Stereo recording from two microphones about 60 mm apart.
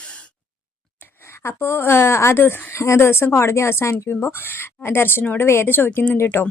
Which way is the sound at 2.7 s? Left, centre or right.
Left.